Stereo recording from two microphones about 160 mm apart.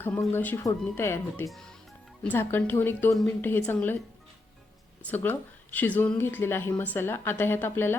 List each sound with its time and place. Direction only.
0.0 s speech: 10° left (ahead or behind)
5.0 s speech: 10° left (ahead or behind)